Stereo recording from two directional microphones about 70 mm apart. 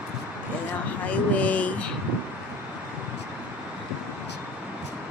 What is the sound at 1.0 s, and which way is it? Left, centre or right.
Speech, left.